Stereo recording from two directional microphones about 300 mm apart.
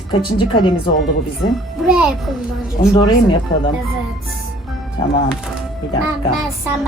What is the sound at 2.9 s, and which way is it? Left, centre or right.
Speech, centre.